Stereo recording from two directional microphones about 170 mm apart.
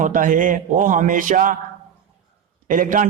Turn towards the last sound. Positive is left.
turn(degrees=-50)  # may be behind; listen again after turning